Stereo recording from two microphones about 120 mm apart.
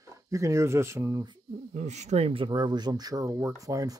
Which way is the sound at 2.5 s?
35° right (ahead or behind).